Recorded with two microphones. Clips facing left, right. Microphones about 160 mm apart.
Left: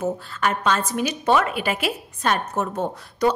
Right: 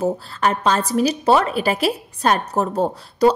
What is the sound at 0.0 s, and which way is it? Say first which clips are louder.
A woman's voice: right 4 dB; 35° right (ahead or behind).